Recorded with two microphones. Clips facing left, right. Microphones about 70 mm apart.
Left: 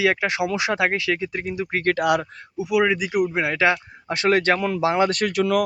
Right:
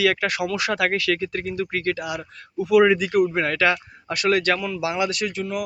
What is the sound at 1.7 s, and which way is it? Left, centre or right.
Speech, left.